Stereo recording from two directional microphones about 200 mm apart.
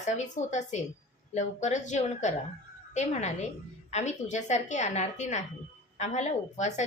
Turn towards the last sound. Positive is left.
turn(degrees=35)  # may be behind; listen again after turning